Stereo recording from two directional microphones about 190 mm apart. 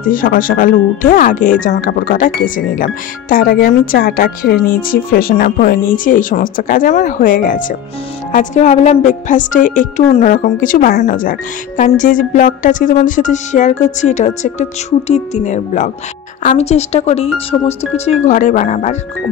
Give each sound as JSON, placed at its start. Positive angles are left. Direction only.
{"t": 0.0, "sound": "a woman's voice", "side_deg": 45}